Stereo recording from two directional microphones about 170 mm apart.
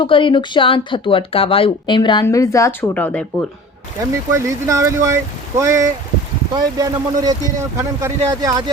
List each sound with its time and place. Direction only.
0.0 s speech: 30° left (ahead or behind); by 3.2 s 10° left (ahead or behind)
4.3 s speech: 15° right (ahead or behind)